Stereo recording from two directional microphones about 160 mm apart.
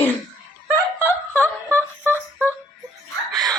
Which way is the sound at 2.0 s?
15° right (ahead or behind).